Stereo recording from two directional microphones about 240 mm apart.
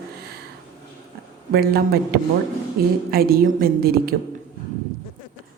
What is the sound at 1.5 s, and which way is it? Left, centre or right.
Speech, right.